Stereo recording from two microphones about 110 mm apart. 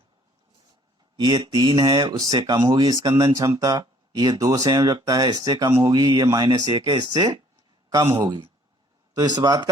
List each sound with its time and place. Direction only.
1.2 s speech: 35° right (ahead or behind)
8.1 s speech: 45° right (ahead or behind)